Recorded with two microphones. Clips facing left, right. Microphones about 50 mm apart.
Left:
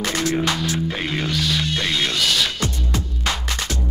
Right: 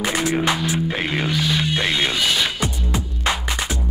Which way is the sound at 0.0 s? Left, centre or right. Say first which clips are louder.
Right 1 dB; centre.